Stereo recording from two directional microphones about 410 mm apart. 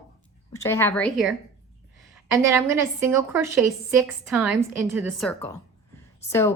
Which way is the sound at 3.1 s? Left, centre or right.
Centre.